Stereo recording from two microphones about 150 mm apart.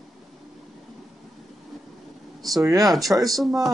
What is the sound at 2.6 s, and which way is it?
Speech, 20° right (ahead or behind).